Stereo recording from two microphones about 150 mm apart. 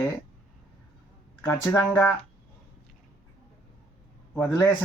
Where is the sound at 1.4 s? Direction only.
15° left (ahead or behind).